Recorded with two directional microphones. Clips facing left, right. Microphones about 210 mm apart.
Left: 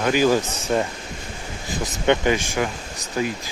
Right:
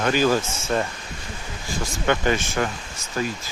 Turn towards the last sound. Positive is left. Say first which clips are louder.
# left 2 dB
turn(degrees=15)  # may be behind; listen again after turning